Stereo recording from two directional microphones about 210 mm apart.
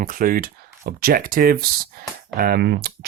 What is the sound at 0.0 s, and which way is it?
Speech, 40° right (ahead or behind).